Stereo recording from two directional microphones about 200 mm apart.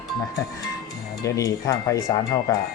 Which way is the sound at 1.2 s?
15° left (ahead or behind).